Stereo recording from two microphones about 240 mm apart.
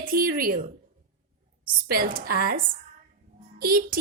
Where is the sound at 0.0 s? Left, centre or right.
Right.